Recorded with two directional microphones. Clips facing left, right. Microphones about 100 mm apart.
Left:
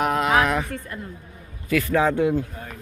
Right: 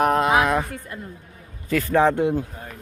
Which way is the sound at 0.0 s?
35° right (ahead or behind).